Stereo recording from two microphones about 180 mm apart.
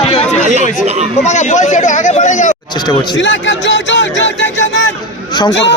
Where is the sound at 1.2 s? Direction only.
40° left (ahead or behind).